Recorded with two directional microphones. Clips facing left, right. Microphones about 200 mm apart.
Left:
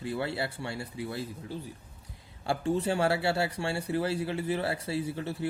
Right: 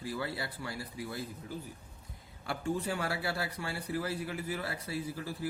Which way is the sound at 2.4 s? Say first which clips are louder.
Left 6 dB; 30° left (ahead or behind).